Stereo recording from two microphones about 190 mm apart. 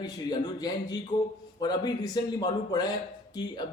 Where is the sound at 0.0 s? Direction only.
20° left (ahead or behind).